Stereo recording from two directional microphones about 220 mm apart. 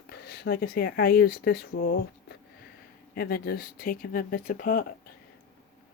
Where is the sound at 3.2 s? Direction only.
45° left (ahead or behind).